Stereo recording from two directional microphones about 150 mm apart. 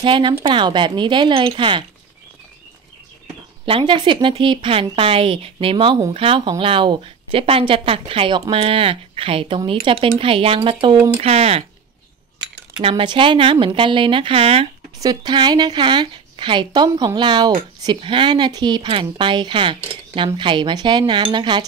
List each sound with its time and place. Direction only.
0.0 s a woman's voice: 35° right (ahead or behind)
3.6 s a woman's voice: 35° right (ahead or behind)
12.8 s a woman's voice: 35° right (ahead or behind)
15.0 s a woman's voice: 25° right (ahead or behind)